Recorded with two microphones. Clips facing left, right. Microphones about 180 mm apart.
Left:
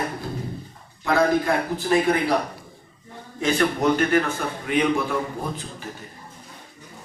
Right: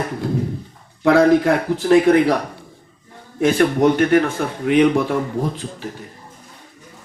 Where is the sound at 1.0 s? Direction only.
75° right (ahead or behind).